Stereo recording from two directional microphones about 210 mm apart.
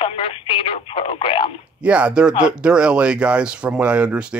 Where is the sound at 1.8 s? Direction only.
5° right (ahead or behind).